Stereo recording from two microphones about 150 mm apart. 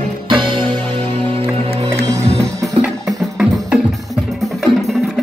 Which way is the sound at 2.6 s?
Centre (ahead or behind).